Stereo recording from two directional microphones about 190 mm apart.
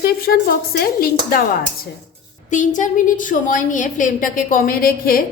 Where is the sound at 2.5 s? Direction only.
40° left (ahead or behind).